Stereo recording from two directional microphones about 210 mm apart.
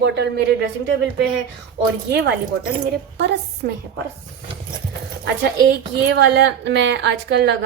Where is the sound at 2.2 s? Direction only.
50° right (ahead or behind).